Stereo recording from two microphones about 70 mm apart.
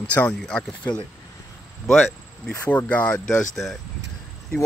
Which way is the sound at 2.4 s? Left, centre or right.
Centre.